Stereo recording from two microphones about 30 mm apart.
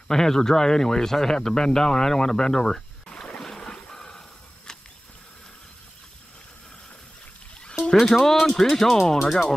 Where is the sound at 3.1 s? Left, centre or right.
Left.